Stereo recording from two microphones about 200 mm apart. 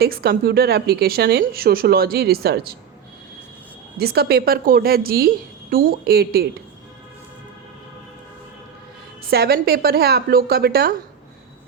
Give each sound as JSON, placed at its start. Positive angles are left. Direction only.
{"t": 0.0, "sound": "speech", "side_deg": -50}
{"t": 3.9, "sound": "speech", "side_deg": -50}
{"t": 9.3, "sound": "speech", "side_deg": -50}